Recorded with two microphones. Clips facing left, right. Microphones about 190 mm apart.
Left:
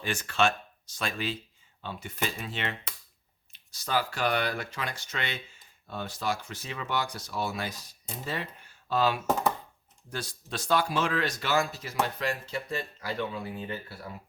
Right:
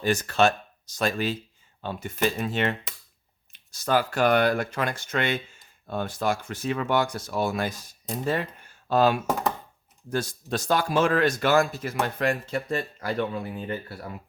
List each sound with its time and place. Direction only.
0.0 s speech: 40° right (ahead or behind)